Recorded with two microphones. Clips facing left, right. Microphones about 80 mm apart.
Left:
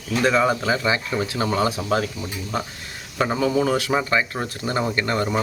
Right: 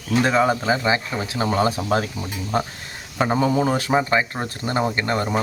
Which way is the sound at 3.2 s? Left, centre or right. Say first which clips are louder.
Right 1 dB; right.